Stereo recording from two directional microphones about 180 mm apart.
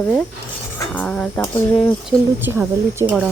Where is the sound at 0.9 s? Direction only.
5° left (ahead or behind).